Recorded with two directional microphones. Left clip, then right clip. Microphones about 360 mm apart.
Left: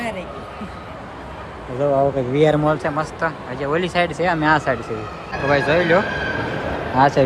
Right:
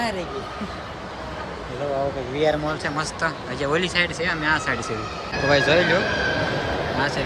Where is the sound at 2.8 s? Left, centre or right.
Centre.